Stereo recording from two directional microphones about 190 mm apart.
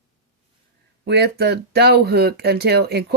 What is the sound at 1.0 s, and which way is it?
Speech, 60° right (ahead or behind).